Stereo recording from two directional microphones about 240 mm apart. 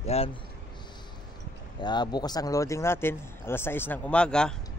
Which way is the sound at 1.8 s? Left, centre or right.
Centre.